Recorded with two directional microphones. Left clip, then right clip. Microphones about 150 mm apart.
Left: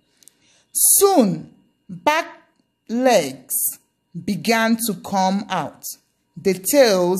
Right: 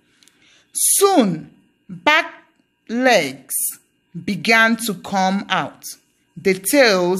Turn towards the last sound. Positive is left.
turn(degrees=15)  # may be behind; listen again after turning